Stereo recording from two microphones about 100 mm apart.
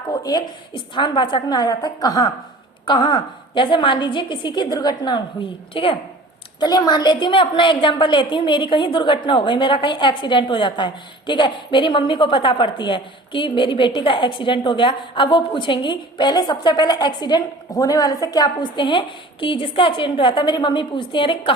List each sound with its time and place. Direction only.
0.1 s a woman's voice: 45° left (ahead or behind)
5.7 s a woman's voice: 60° left (ahead or behind)
6.6 s a woman's voice: 45° left (ahead or behind)